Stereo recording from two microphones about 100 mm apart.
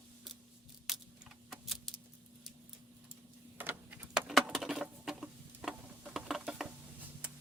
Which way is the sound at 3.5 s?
20° right (ahead or behind).